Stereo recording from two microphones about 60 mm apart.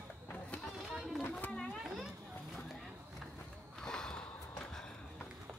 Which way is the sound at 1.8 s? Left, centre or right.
Centre.